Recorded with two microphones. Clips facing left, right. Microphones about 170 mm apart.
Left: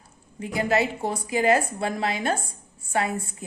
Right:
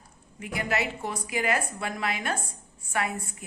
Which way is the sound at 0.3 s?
30° left (ahead or behind).